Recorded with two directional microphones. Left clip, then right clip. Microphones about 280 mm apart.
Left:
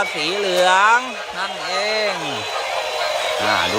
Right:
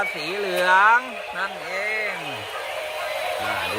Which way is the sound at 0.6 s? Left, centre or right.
Centre.